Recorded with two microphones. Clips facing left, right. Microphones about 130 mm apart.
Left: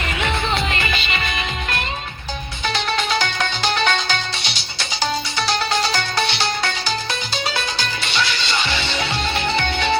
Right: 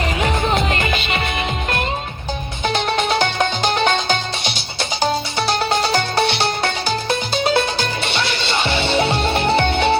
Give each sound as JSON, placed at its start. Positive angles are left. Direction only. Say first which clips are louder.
{"t": 0.2, "sound": "music", "louder": "right 2 dB", "side_deg": -40}
{"t": 5.8, "sound": "music", "louder": "right 4 dB", "side_deg": -50}
{"t": 8.8, "sound": "music", "louder": "right 6 dB", "side_deg": -55}